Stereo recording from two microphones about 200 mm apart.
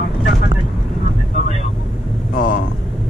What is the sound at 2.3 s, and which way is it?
Speech, 40° left (ahead or behind).